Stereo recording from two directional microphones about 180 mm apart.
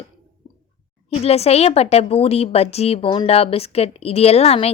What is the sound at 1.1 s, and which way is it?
A woman's voice, 35° left (ahead or behind).